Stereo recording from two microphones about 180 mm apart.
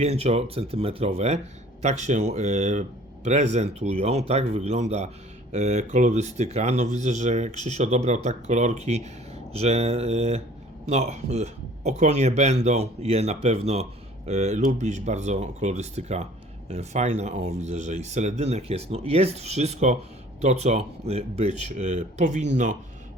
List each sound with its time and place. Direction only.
0.0 s speech: 35° right (ahead or behind)